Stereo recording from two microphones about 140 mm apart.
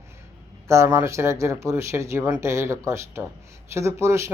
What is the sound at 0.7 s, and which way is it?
Speech, 20° right (ahead or behind).